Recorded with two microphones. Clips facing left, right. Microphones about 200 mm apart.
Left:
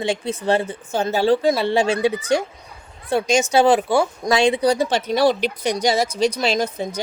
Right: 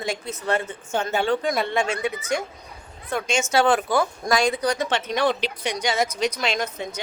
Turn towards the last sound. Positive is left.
turn(degrees=35)  # may be behind; listen again after turning